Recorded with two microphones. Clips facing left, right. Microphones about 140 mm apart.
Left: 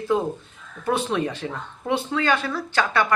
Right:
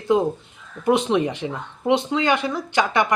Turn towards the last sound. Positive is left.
turn(degrees=-15)  # may be behind; listen again after turning